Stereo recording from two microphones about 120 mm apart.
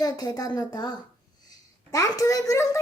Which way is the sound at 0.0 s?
30° left (ahead or behind).